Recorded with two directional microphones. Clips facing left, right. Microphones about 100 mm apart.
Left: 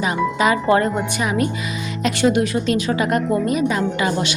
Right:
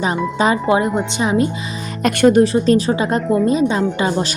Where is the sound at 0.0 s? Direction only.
30° right (ahead or behind).